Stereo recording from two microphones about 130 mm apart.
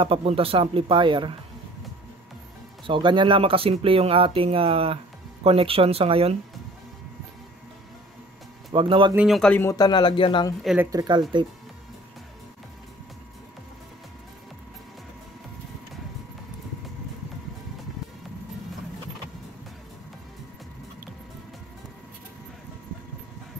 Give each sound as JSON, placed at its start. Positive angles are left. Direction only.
{"t": 0.0, "sound": "speech", "side_deg": -45}
{"t": 2.9, "sound": "speech", "side_deg": -40}
{"t": 8.7, "sound": "speech", "side_deg": -40}
{"t": 9.3, "sound": "speech", "side_deg": 5}
{"t": 9.6, "sound": "speech", "side_deg": 25}
{"t": 10.9, "sound": "speech", "side_deg": -30}